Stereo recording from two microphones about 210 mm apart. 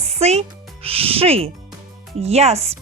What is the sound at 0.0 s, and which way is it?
Speech, 30° right (ahead or behind).